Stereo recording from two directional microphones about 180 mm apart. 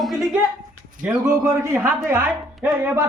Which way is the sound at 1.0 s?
15° right (ahead or behind).